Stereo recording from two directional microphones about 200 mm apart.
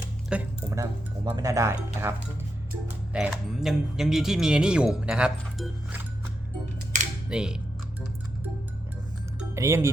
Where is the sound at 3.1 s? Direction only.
Centre (ahead or behind).